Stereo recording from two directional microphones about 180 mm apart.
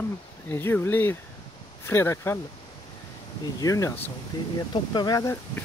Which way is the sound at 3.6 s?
15° left (ahead or behind).